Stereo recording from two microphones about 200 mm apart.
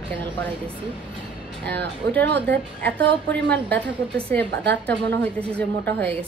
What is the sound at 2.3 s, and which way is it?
A woman's voice, 10° left (ahead or behind).